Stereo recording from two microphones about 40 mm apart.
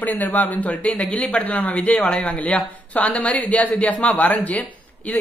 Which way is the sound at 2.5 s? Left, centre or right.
Left.